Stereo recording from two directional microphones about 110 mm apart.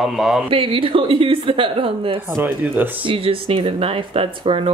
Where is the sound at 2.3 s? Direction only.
20° right (ahead or behind).